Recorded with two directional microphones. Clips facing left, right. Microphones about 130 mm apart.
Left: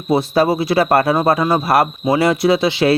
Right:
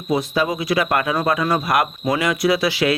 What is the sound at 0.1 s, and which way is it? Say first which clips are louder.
Speech: left 5 dB; 30° left (ahead or behind).